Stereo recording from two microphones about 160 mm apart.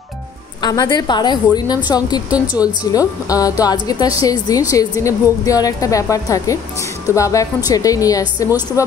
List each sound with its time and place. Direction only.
0.6 s a woman's voice: 25° left (ahead or behind)